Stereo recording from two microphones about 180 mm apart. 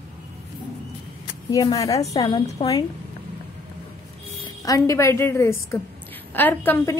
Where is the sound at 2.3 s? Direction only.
30° left (ahead or behind).